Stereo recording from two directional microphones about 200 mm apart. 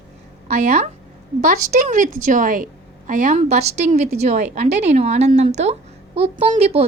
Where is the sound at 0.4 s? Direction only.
35° right (ahead or behind).